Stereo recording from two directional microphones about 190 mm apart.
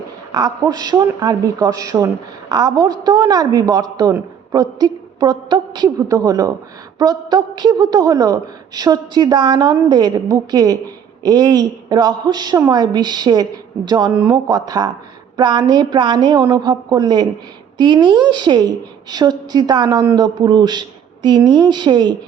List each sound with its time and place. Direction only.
0.3 s a woman's voice: 20° right (ahead or behind)